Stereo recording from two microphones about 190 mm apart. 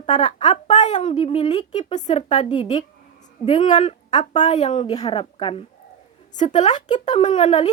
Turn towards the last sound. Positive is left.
turn(degrees=35)  # may be behind; listen again after turning